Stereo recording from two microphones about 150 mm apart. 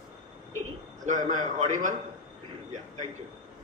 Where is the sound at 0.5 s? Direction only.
55° right (ahead or behind).